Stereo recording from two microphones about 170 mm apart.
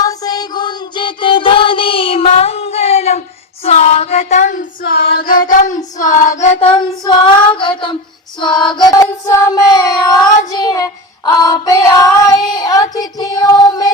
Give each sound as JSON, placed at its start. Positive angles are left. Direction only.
{"t": 0.0, "sound": "music", "side_deg": 20}
{"t": 8.7, "sound": "child singing", "side_deg": 25}